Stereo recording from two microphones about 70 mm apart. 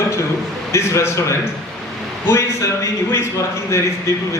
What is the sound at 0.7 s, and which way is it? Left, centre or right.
Speech, left.